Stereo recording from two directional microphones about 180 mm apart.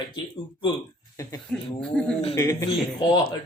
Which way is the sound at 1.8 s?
5° left (ahead or behind).